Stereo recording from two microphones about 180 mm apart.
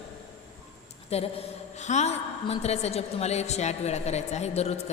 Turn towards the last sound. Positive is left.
turn(degrees=35)  # may be behind; listen again after turning